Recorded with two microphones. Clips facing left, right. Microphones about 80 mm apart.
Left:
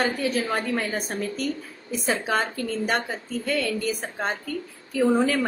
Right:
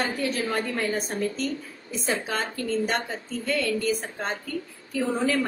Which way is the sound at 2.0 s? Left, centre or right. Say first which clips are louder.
Left 3 dB; centre.